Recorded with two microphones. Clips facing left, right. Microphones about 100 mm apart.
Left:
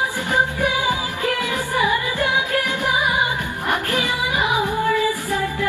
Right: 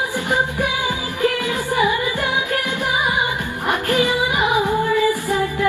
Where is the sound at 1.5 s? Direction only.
15° right (ahead or behind).